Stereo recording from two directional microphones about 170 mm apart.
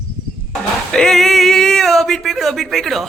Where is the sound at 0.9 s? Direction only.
5° left (ahead or behind).